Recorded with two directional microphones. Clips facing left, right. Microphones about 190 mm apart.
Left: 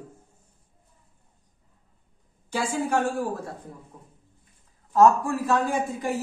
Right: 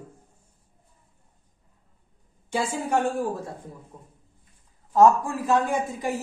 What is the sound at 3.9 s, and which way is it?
A man's voice, 20° right (ahead or behind).